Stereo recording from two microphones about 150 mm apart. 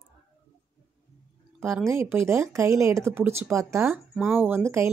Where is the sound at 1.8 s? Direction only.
15° right (ahead or behind).